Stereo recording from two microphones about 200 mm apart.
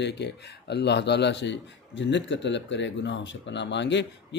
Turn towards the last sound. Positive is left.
turn(degrees=60)  # may be behind; listen again after turning